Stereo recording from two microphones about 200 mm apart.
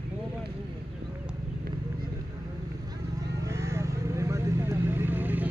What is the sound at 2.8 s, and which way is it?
Vehicle, 20° right (ahead or behind).